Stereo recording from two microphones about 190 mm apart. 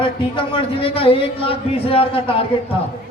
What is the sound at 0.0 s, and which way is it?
A man's voice, 25° left (ahead or behind).